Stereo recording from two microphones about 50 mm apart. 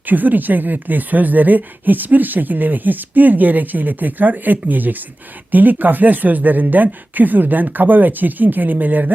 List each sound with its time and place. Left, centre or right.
0.0 s speech: right